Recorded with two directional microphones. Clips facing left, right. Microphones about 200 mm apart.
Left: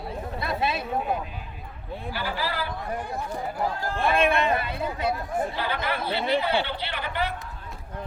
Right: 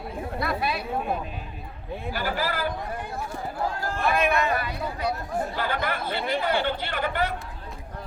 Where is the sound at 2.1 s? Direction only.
45° right (ahead or behind).